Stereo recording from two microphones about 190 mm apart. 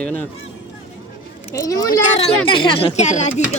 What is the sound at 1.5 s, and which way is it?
A woman's voice, 15° left (ahead or behind).